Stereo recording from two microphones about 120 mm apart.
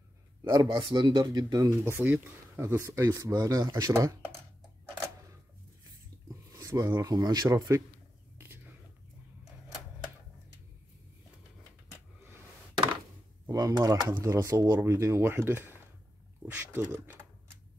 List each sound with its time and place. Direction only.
0.4 s speech: 35° right (ahead or behind)
1.2 s speech: 30° right (ahead or behind)
6.5 s speech: 30° right (ahead or behind)
12.2 s a sound: 20° right (ahead or behind)
13.5 s speech: 30° right (ahead or behind)